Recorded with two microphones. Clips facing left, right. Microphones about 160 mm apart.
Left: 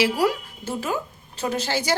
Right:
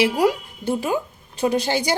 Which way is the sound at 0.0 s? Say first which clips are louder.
Right 3 dB; 20° right (ahead or behind).